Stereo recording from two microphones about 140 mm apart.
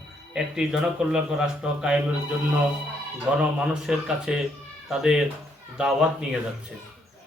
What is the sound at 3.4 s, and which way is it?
A man's voice, 5° right (ahead or behind).